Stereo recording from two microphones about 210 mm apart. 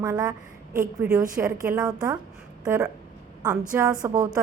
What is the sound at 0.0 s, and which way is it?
A woman's voice, 15° right (ahead or behind).